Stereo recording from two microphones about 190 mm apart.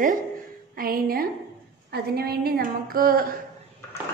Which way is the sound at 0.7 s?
50° right (ahead or behind).